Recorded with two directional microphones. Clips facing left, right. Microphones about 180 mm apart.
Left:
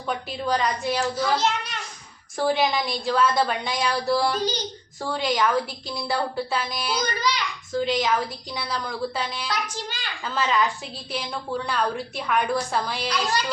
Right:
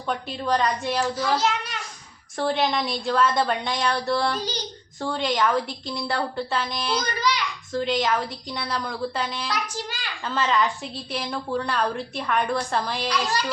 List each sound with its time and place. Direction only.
0.1 s a woman's voice: centre (ahead or behind)